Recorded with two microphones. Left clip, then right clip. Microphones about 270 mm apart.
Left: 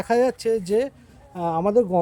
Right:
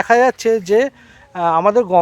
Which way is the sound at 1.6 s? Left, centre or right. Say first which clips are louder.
Right 3 dB; right.